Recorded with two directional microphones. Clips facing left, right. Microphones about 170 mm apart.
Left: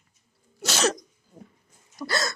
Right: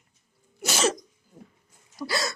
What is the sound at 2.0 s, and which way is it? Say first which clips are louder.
Hiccup: left 1 dB; 5° right (ahead or behind).